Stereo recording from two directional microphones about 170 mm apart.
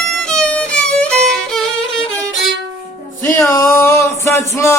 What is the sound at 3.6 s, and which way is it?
Male singing, 15° left (ahead or behind).